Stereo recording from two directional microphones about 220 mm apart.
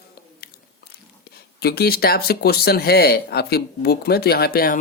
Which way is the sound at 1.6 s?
45° left (ahead or behind).